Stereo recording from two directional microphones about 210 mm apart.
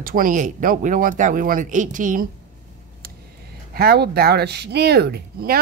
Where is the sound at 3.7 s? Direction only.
45° right (ahead or behind).